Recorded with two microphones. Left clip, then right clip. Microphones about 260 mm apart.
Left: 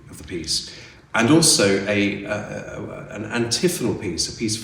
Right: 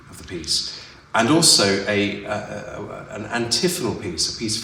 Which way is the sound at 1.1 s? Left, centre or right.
Centre.